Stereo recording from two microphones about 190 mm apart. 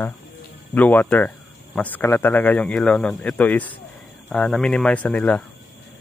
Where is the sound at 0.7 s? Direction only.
10° left (ahead or behind).